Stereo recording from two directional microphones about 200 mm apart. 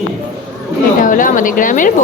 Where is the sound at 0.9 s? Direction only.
40° left (ahead or behind).